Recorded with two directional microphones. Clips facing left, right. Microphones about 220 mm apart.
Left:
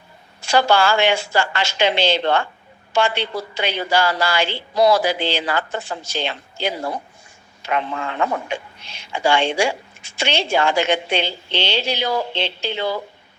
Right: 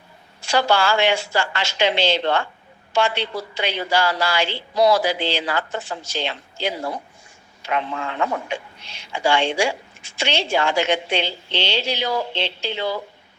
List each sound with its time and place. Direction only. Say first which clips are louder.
0.4 s speech: left 2 dB; 50° left (ahead or behind)
8.2 s speech: left 2 dB; 50° left (ahead or behind)